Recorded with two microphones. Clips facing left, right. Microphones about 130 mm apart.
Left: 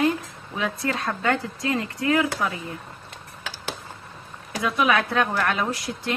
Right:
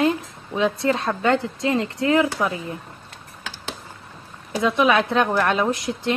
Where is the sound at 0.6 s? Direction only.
25° right (ahead or behind).